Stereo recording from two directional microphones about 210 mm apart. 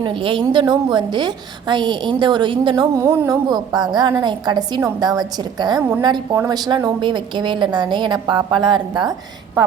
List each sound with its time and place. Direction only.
0.0 s a woman's voice: 25° right (ahead or behind)